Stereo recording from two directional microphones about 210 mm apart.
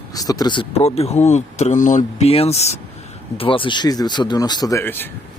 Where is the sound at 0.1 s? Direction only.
15° left (ahead or behind).